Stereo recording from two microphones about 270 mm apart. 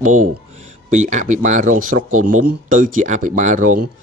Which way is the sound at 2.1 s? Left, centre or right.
Right.